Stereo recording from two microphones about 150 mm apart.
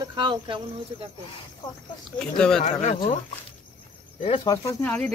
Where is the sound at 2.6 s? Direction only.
45° left (ahead or behind).